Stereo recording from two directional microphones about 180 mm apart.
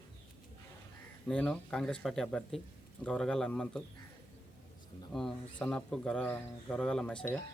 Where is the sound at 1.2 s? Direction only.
5° left (ahead or behind).